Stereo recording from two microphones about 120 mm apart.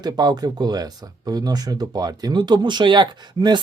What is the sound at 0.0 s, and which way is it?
Speech, 35° right (ahead or behind).